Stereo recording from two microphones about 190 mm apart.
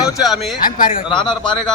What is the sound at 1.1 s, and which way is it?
Speech, 25° left (ahead or behind).